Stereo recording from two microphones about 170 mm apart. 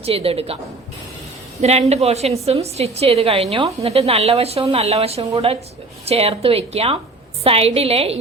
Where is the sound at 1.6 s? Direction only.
40° right (ahead or behind).